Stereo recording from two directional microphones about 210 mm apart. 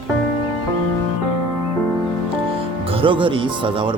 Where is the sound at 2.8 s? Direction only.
25° right (ahead or behind).